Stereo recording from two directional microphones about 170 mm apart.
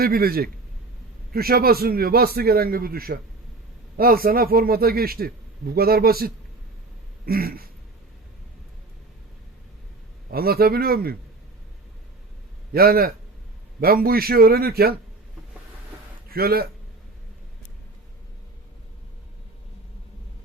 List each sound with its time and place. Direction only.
0.0 s speech: 60° right (ahead or behind)
10.3 s speech: 65° right (ahead or behind)
12.7 s speech: 65° right (ahead or behind)
16.3 s speech: 65° right (ahead or behind)